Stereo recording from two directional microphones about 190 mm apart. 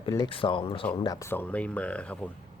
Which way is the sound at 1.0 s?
10° left (ahead or behind).